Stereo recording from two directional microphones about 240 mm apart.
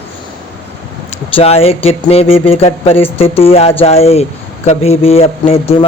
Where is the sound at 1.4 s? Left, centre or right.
Left.